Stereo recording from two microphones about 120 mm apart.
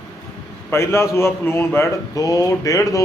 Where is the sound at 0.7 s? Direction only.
20° left (ahead or behind).